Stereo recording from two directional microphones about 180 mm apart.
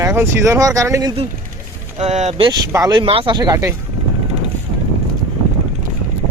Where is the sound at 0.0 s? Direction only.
15° right (ahead or behind).